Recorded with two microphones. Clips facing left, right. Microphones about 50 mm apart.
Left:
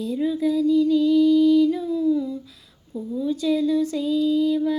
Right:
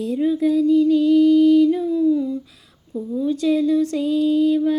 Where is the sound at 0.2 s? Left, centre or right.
Right.